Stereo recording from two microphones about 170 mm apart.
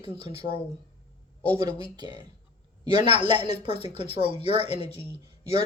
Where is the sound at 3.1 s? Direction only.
30° right (ahead or behind).